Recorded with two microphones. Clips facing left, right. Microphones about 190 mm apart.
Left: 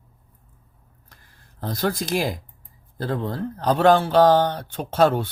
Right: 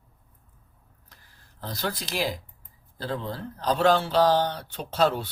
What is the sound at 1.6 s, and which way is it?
A man's voice, 50° left (ahead or behind).